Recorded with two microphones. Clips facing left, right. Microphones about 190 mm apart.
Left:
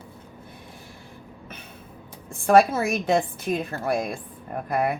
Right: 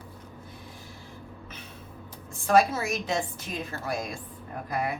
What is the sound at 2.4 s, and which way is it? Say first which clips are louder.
A woman's voice: left 5 dB; 55° left (ahead or behind).